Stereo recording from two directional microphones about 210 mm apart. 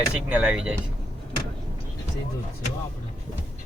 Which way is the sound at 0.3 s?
5° right (ahead or behind).